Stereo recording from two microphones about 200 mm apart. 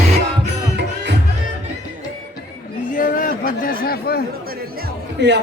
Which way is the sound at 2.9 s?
45° left (ahead or behind).